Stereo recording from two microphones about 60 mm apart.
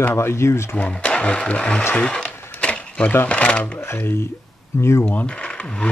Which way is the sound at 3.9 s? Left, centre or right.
Left.